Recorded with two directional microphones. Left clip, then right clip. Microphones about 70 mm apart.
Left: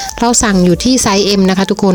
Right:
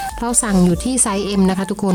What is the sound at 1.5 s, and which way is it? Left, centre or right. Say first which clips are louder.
Speech: left 8 dB; left.